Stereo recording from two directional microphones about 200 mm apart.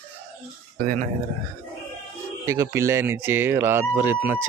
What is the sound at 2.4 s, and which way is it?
Speech, 15° right (ahead or behind).